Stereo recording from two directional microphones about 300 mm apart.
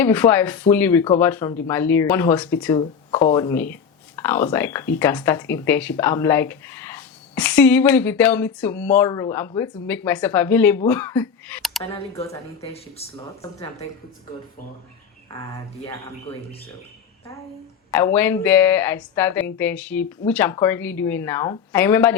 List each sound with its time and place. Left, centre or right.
0.0 s speech: centre
11.8 s speech: centre
17.9 s speech: centre